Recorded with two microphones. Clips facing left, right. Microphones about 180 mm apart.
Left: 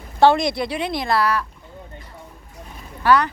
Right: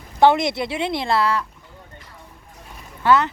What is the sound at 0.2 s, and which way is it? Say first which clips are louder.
Speech: even; 20° right (ahead or behind).